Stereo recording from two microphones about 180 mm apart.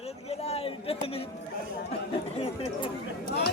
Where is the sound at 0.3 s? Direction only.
35° left (ahead or behind).